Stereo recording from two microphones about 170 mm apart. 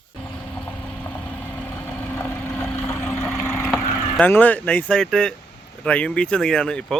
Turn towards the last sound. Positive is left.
turn(degrees=5)  # may be behind; listen again after turning